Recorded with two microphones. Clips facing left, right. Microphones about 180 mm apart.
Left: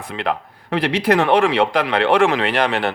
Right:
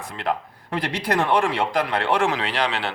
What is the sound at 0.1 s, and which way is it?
A man's voice, 75° left (ahead or behind).